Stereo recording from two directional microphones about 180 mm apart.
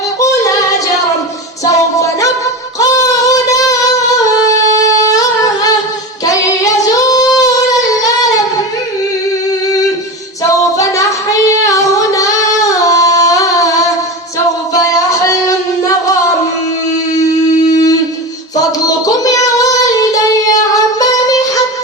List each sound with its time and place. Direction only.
0.2 s yodeling: 15° left (ahead or behind)
3.2 s music: 20° left (ahead or behind)
5.0 s singing: 20° left (ahead or behind)
11.6 s singing: 15° left (ahead or behind)
14.7 s music: 20° left (ahead or behind)
17.7 s a sound: 20° left (ahead or behind)
18.5 s child singing: 20° left (ahead or behind)